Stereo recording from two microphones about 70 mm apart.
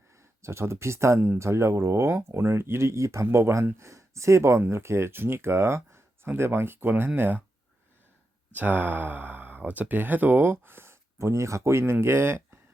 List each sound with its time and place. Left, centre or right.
0.4 s speech: right
8.5 s speech: right